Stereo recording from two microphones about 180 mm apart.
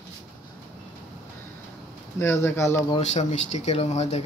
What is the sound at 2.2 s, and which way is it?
Speech, 15° left (ahead or behind).